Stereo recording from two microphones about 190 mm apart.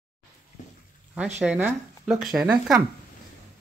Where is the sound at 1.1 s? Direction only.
5° right (ahead or behind).